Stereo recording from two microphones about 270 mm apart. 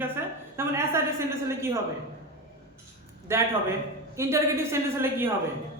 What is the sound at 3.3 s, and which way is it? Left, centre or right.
A man's voice, centre.